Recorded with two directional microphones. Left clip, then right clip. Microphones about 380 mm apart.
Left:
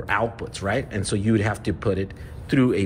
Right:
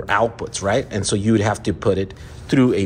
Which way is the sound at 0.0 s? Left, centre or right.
Centre.